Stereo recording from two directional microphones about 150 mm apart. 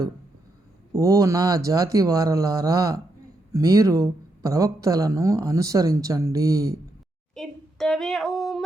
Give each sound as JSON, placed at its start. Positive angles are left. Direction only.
{"t": 0.9, "sound": "speech", "side_deg": -20}
{"t": 7.3, "sound": "speech", "side_deg": 5}